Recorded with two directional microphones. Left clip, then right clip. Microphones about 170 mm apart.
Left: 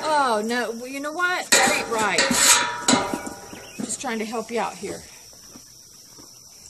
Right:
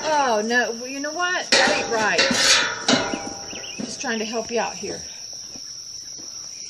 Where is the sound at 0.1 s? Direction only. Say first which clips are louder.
Right 2 dB; 55° left (ahead or behind).